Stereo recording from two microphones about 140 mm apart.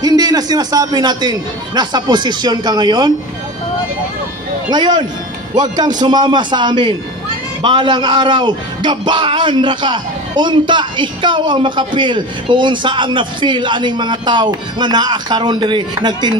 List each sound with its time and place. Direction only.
0.0 s a man's voice: 30° right (ahead or behind)
4.6 s speech: 30° right (ahead or behind)